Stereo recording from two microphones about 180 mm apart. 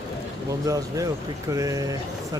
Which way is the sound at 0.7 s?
20° right (ahead or behind).